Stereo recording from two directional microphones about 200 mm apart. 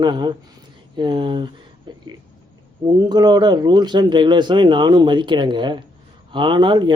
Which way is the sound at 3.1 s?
20° right (ahead or behind).